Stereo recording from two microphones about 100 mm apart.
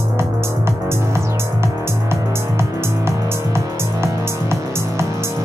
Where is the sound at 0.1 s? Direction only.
25° right (ahead or behind).